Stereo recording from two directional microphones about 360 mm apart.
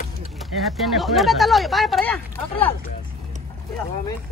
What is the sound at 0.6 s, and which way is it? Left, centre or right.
Speech, centre.